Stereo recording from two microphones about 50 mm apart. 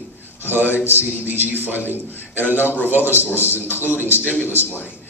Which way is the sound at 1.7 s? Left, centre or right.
Left.